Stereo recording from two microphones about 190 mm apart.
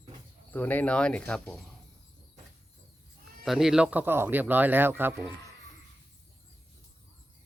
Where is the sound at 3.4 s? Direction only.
Centre (ahead or behind).